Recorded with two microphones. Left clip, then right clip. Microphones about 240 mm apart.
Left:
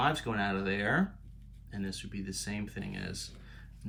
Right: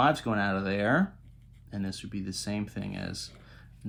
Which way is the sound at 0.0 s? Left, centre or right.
Right.